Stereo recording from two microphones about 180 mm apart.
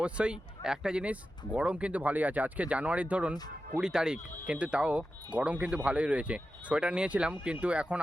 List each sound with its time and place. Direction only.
0.0 s speech: 5° right (ahead or behind)